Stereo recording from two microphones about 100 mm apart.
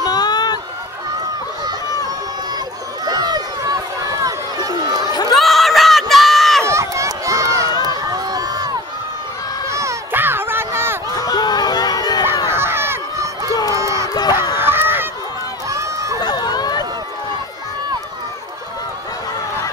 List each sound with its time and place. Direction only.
0.0 s a sound: 45° left (ahead or behind)
3.1 s run: 40° right (ahead or behind)
5.0 s run: 45° left (ahead or behind)
5.3 s crowd: centre (ahead or behind)
6.6 s run: 30° right (ahead or behind)
7.8 s crowd: 40° right (ahead or behind)
9.7 s a sound: 30° right (ahead or behind)
11.1 s crowd: 40° left (ahead or behind)
12.4 s a sound: 25° right (ahead or behind)
13.7 s crowd: 30° right (ahead or behind)
14.0 s crowd: 40° left (ahead or behind)
14.5 s a sound: 20° right (ahead or behind)
15.7 s run: 30° right (ahead or behind)
16.2 s run: 45° left (ahead or behind)